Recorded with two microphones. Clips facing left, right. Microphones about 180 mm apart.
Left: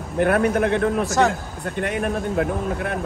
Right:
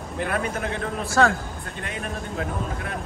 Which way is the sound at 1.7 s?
55° left (ahead or behind).